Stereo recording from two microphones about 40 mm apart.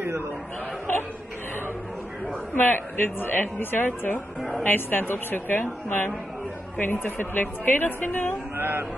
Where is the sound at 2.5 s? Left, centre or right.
Left.